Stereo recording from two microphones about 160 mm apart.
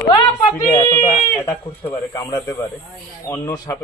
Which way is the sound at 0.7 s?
15° left (ahead or behind).